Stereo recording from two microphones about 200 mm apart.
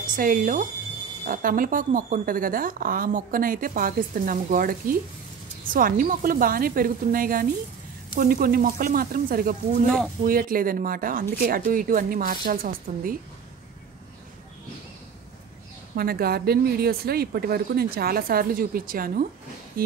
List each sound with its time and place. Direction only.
0.0 s speech: 40° right (ahead or behind)
16.0 s speech: 50° right (ahead or behind)